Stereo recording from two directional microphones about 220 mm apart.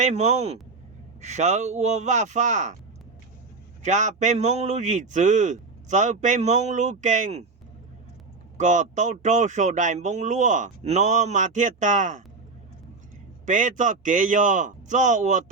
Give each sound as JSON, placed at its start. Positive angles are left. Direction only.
{"t": 0.0, "sound": "speech", "side_deg": -30}
{"t": 3.8, "sound": "speech", "side_deg": -35}
{"t": 8.5, "sound": "speech", "side_deg": -35}
{"t": 13.4, "sound": "speech", "side_deg": -35}